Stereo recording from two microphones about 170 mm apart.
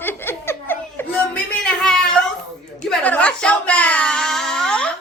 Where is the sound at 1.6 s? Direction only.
5° left (ahead or behind).